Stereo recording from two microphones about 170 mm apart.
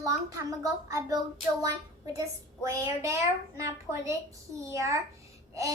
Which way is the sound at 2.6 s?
20° right (ahead or behind).